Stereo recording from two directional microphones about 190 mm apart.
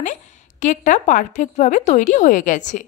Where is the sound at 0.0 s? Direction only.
40° left (ahead or behind).